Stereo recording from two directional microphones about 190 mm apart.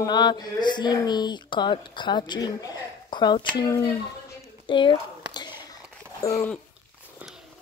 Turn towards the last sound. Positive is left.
turn(degrees=15)  # may be behind; listen again after turning